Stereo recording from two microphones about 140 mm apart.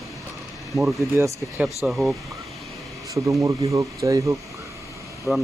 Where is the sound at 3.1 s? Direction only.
20° right (ahead or behind).